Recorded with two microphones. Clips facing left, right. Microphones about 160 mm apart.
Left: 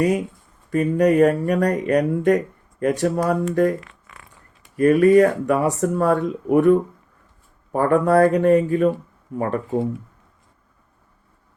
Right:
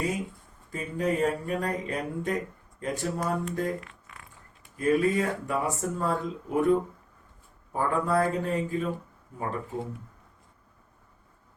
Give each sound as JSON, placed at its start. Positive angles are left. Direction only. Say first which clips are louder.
{"t": 0.7, "sound": "speech", "louder": "left 12 dB", "side_deg": 70}
{"t": 4.1, "sound": "a sound", "louder": "left 3 dB", "side_deg": 90}
{"t": 4.8, "sound": "speech", "louder": "left 11 dB", "side_deg": 70}